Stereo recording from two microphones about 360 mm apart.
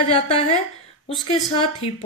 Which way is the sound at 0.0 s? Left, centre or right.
Centre.